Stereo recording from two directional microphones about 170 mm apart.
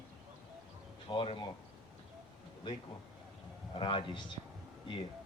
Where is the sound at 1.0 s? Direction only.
30° left (ahead or behind).